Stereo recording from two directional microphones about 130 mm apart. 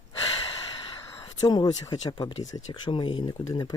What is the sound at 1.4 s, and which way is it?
Speech, 35° left (ahead or behind).